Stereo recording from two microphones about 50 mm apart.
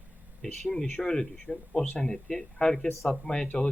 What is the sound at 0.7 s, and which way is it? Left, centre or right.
A man's voice, centre.